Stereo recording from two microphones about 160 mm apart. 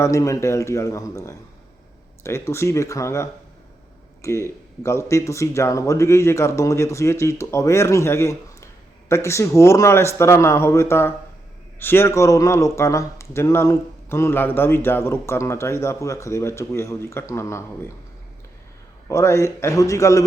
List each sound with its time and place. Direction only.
0.0 s a man's voice: 20° left (ahead or behind)
19.0 s speech: 20° left (ahead or behind)